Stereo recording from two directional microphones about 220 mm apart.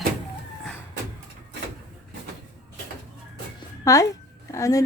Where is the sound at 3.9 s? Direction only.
15° left (ahead or behind).